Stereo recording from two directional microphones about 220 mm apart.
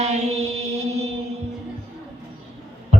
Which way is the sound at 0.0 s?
30° right (ahead or behind).